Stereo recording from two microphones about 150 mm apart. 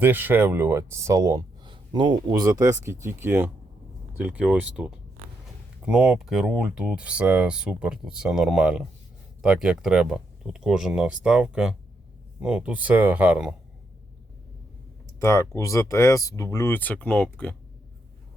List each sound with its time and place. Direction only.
0.0 s speech: 15° right (ahead or behind)
15.2 s speech: 20° left (ahead or behind)